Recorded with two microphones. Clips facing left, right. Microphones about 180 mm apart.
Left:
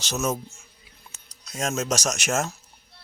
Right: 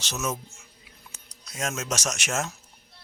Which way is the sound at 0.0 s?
40° left (ahead or behind).